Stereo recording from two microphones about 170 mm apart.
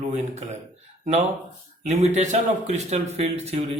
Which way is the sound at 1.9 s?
40° right (ahead or behind).